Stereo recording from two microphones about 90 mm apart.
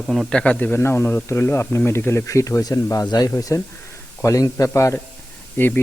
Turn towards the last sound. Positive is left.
turn(degrees=25)  # may be behind; listen again after turning